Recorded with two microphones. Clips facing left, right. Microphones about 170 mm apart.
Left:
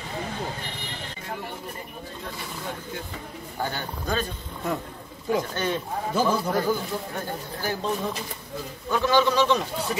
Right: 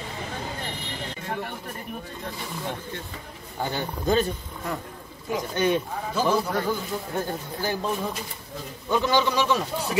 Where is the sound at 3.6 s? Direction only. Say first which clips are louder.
Right 3 dB; 20° right (ahead or behind).